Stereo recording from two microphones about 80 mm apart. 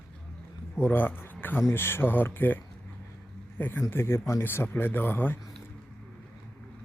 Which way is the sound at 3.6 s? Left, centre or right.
Left.